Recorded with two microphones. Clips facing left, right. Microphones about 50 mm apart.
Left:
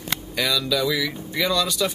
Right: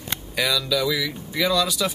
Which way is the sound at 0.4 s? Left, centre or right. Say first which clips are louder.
Even; centre.